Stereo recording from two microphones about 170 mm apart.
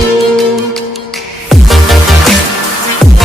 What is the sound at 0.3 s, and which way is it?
Music, centre (ahead or behind).